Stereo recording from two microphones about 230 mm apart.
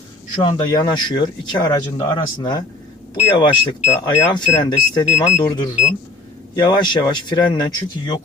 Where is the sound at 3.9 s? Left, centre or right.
Left.